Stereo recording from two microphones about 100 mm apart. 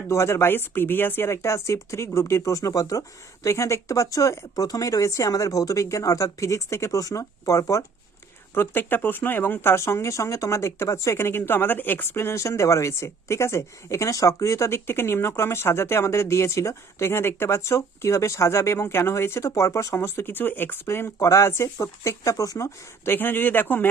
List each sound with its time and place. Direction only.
0.1 s speech: 25° left (ahead or behind)
8.5 s speech: 20° left (ahead or behind)
23.1 s speech: 20° left (ahead or behind)